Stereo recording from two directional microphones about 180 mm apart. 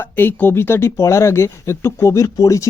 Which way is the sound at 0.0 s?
10° left (ahead or behind).